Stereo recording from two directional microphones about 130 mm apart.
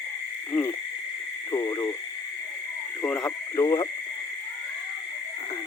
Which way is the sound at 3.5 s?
30° left (ahead or behind).